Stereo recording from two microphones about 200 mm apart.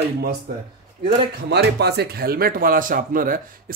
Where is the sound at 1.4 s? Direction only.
55° right (ahead or behind).